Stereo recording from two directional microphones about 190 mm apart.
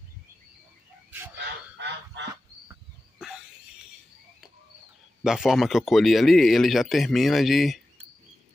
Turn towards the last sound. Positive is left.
turn(degrees=0)  # may be behind; listen again after turning